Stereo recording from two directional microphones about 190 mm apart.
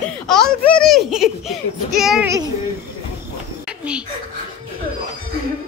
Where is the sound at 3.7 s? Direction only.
5° right (ahead or behind).